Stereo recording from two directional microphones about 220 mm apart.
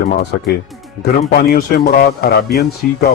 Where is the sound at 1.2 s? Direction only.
40° left (ahead or behind).